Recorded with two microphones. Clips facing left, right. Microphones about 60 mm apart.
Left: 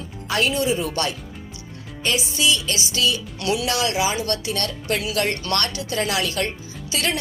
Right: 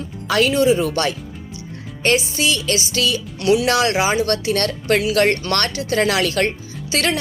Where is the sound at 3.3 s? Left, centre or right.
Right.